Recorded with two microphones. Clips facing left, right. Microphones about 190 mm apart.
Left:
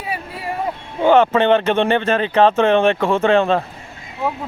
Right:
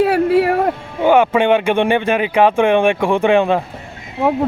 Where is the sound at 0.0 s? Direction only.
75° right (ahead or behind).